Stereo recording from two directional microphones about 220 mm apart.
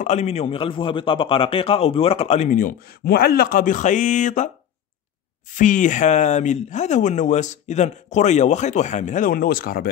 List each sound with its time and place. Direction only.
0.0 s a man's voice: 30° left (ahead or behind)
5.5 s speech: 35° left (ahead or behind)